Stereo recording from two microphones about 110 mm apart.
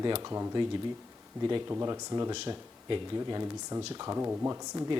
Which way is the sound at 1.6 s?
25° right (ahead or behind).